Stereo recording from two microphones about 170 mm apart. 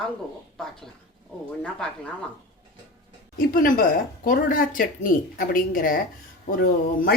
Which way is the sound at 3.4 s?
55° left (ahead or behind).